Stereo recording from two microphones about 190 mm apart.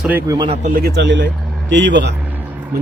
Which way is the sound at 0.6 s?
50° right (ahead or behind).